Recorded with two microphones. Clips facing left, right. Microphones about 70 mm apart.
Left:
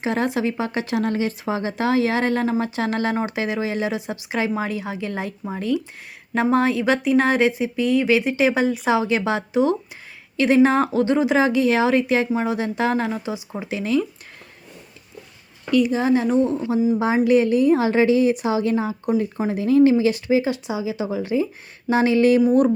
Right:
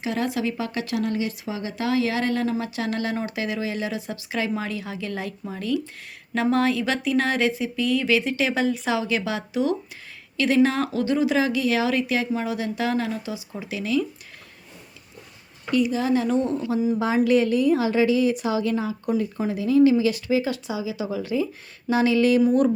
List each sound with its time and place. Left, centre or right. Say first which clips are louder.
0.0 s a woman's voice: left 4 dB; left
15.9 s a woman's voice: left 3 dB; left
22.4 s speech: left 2 dB; centre